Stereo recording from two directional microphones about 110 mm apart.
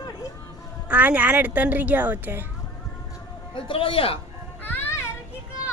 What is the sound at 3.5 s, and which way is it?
Speech, 55° left (ahead or behind).